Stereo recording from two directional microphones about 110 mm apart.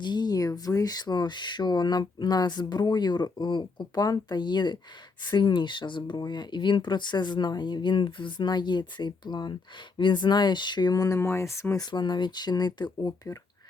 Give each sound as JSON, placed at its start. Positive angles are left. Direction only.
{"t": 0.0, "sound": "speech", "side_deg": 40}
{"t": 11.9, "sound": "speech", "side_deg": 45}